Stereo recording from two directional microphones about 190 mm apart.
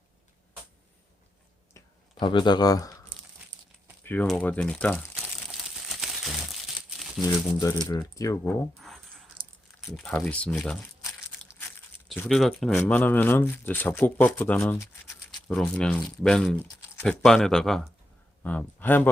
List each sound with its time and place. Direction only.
1.7 s clicking: 25° left (ahead or behind)
4.0 s speech: 10° left (ahead or behind)
5.5 s crumpling: centre (ahead or behind)
7.3 s speech: 15° left (ahead or behind)
9.9 s speech: 5° left (ahead or behind)
12.2 s speech: centre (ahead or behind)